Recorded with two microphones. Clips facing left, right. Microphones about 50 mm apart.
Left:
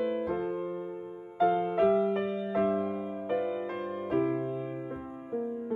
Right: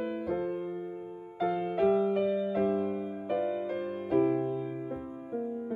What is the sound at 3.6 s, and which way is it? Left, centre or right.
Music, left.